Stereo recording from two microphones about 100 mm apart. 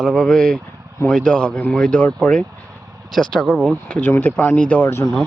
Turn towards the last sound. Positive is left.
turn(degrees=20)  # may be behind; listen again after turning